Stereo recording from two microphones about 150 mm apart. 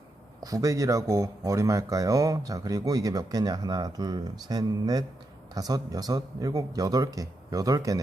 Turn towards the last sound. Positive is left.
turn(degrees=-25)  # may be behind; listen again after turning